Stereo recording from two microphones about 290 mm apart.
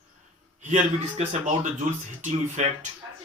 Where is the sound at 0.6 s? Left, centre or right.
Right.